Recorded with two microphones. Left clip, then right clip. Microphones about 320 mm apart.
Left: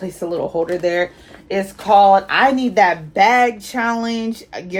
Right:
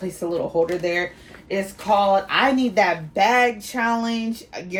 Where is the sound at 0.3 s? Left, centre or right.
Left.